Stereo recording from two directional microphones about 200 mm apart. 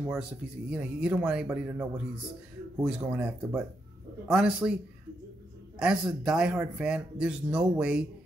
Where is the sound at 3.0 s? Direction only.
10° right (ahead or behind).